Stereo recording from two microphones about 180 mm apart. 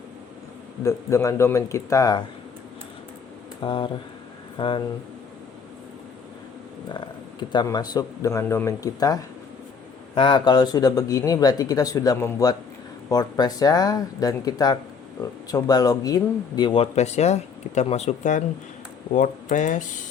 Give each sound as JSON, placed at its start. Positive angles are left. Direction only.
{"t": 0.9, "sound": "speech", "side_deg": 15}
{"t": 3.6, "sound": "a man's voice", "side_deg": 25}
{"t": 6.8, "sound": "a man's voice", "side_deg": 25}